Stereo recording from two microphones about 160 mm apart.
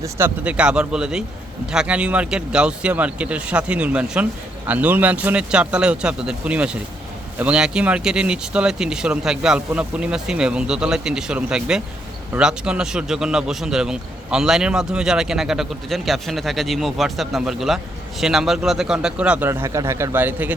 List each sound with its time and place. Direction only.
0.0 s a man's voice: 10° right (ahead or behind)